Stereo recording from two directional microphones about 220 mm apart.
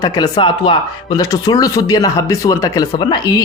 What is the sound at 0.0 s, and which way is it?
Speech, 20° left (ahead or behind).